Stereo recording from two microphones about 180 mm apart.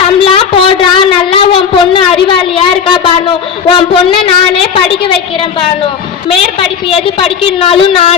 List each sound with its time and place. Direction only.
0.2 s a woman's voice: 30° left (ahead or behind)